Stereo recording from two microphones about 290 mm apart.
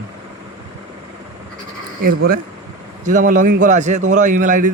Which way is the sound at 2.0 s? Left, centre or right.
Right.